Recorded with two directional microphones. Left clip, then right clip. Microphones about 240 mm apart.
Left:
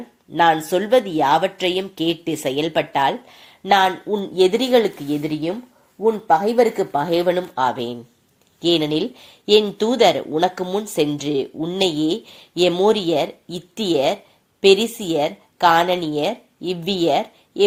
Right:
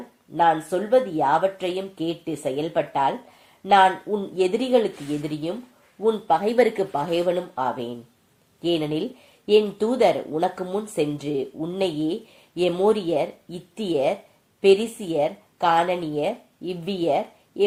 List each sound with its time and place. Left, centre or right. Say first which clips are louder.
0.3 s a woman's voice: left 4 dB; left